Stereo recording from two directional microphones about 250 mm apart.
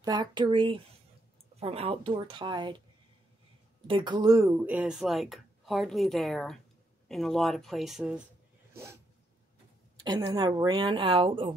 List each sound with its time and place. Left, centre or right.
0.0 s a woman's voice: centre
3.8 s speech: centre
10.0 s a woman's voice: centre